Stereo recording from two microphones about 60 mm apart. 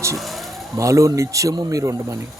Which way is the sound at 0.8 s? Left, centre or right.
Right.